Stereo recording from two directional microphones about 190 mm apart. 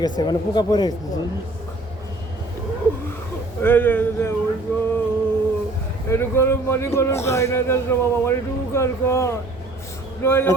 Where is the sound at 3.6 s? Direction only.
10° left (ahead or behind).